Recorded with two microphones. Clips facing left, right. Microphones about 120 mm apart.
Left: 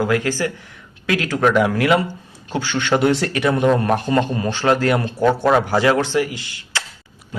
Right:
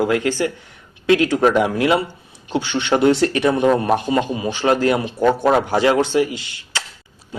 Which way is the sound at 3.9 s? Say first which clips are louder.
Even; 10° right (ahead or behind).